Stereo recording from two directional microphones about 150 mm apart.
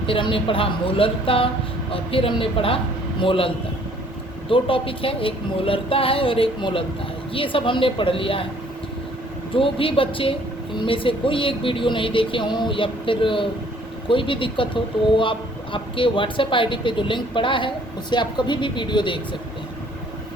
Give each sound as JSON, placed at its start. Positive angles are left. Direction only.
{"t": 0.0, "sound": "speech", "side_deg": 35}
{"t": 9.6, "sound": "speech", "side_deg": 35}